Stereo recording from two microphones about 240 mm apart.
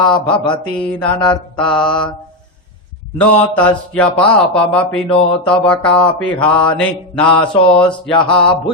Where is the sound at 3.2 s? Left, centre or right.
Centre.